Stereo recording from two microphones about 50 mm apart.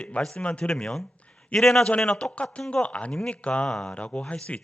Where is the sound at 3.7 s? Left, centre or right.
Centre.